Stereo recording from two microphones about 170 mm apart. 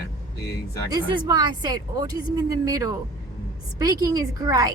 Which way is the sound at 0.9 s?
25° right (ahead or behind).